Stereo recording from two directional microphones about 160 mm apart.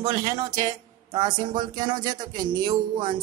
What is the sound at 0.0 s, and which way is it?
Speech, 20° right (ahead or behind).